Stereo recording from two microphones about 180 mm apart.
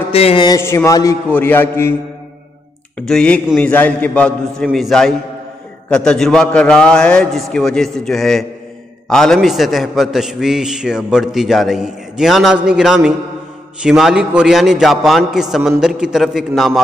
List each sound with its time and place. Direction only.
0.1 s speech: 35° left (ahead or behind)
0.5 s a man's voice: 15° left (ahead or behind)
3.0 s a man's voice: 5° left (ahead or behind)